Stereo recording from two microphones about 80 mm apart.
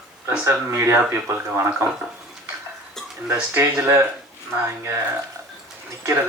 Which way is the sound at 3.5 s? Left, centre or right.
Right.